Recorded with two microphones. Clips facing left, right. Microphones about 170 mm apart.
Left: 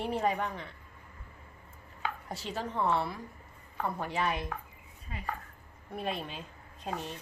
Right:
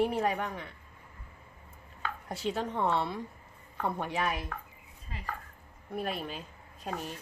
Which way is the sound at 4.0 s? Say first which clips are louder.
Left 2 dB; 10° right (ahead or behind).